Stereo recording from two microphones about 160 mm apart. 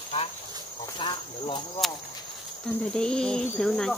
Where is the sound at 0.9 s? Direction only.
30° left (ahead or behind).